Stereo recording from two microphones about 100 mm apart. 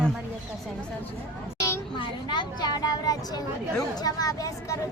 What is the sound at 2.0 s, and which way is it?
Speech, 50° left (ahead or behind).